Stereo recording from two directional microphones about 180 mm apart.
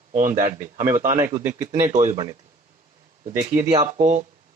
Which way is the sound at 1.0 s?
15° right (ahead or behind).